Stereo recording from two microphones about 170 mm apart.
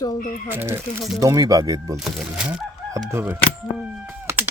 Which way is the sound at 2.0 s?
Centre (ahead or behind).